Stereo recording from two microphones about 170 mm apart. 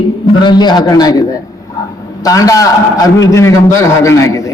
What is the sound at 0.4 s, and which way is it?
A man's voice, 25° left (ahead or behind).